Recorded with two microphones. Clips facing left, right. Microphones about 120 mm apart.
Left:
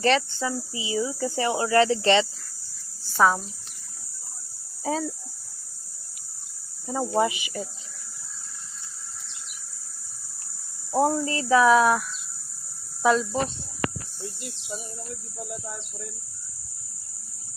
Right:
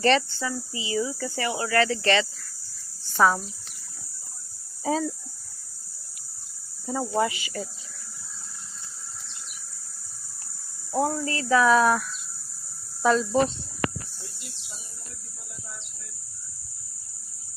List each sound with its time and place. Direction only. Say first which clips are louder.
0.0 s speech: right 1 dB; 5° left (ahead or behind)
0.3 s speech: left 2 dB; 20° left (ahead or behind)
3.1 s speech: even; 5° left (ahead or behind)
4.8 s speech: right 2 dB; centre (ahead or behind)
6.9 s speech: left 2 dB; 10° left (ahead or behind)
10.9 s speech: left 3 dB; 20° left (ahead or behind)